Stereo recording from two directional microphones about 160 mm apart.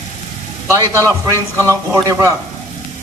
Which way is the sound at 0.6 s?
20° right (ahead or behind).